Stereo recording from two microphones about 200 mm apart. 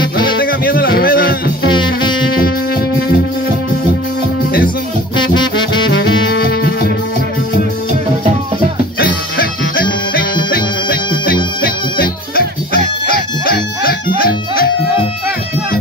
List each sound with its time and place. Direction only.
0.2 s music: 45° left (ahead or behind)
1.7 s music: 25° left (ahead or behind)
5.2 s music: 20° left (ahead or behind)
9.4 s music: 50° left (ahead or behind)